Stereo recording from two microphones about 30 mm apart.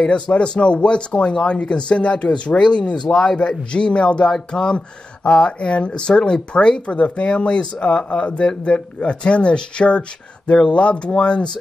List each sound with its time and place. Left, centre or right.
0.0 s speech: left
4.3 s speech: left